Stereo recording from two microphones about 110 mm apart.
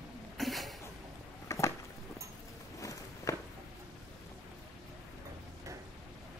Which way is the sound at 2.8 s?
30° left (ahead or behind).